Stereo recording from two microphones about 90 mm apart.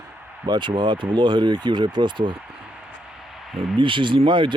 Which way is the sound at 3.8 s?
65° right (ahead or behind).